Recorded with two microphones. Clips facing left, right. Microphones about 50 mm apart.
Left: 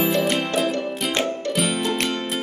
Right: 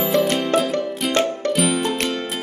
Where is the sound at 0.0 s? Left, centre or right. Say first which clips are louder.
Right 2 dB; centre.